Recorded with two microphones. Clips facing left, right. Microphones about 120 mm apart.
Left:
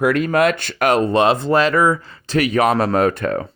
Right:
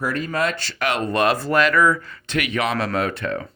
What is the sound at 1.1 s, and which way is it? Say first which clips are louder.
Speech: left 4 dB; 25° left (ahead or behind).